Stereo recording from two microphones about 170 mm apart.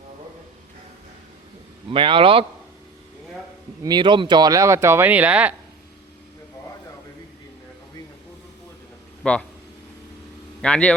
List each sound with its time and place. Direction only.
1.9 s speech: 30° right (ahead or behind)
3.8 s speech: 25° right (ahead or behind); by 5.5 s 10° right (ahead or behind)
9.2 s speech: 5° left (ahead or behind)
10.6 s speech: 5° left (ahead or behind)